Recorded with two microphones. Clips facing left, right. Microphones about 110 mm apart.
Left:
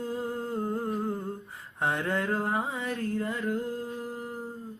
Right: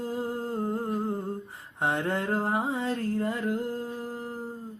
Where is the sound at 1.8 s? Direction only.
25° right (ahead or behind).